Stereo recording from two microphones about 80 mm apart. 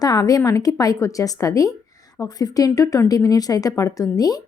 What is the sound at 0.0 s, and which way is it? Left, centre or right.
A woman's voice, left.